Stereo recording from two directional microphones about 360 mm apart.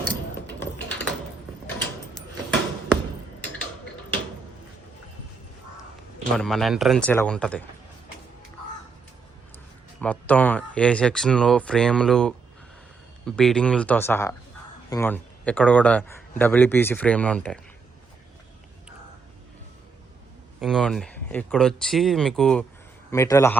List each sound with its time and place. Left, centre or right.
2.1 s a sound: centre
6.3 s a man's voice: centre
10.0 s a man's voice: centre
20.6 s a man's voice: centre